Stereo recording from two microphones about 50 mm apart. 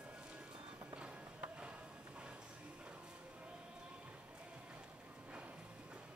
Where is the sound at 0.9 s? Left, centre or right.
Right.